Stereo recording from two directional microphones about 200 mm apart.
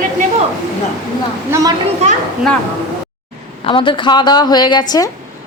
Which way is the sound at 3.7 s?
25° left (ahead or behind).